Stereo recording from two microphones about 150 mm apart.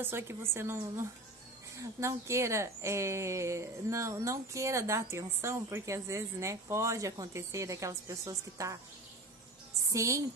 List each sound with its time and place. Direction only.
0.0 s a woman's voice: 15° right (ahead or behind)
9.8 s a woman's voice: 20° right (ahead or behind)